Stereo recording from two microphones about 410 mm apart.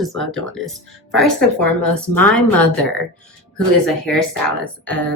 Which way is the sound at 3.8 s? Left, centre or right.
Centre.